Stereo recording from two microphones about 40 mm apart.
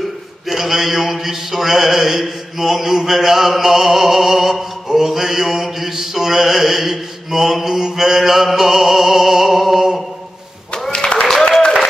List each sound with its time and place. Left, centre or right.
0.5 s mantra: centre
10.9 s applause: left